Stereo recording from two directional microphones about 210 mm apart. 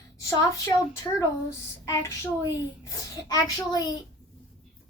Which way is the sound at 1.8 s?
15° left (ahead or behind).